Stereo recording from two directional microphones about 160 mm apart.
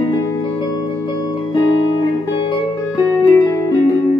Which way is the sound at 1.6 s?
30° left (ahead or behind).